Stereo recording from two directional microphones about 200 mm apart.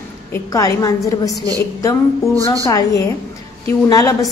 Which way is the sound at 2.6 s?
15° left (ahead or behind).